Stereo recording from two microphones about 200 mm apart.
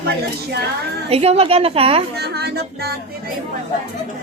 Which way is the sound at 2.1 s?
55° right (ahead or behind).